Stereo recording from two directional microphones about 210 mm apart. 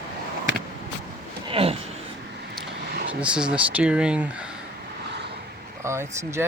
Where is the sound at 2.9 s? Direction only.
60° right (ahead or behind).